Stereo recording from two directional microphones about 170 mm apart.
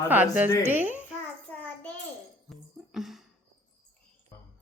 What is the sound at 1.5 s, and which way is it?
Child singing, 10° left (ahead or behind).